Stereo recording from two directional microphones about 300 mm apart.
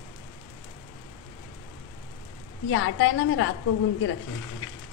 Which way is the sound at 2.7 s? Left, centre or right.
Left.